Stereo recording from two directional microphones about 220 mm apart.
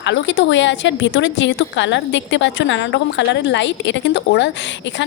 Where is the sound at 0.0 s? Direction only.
55° left (ahead or behind).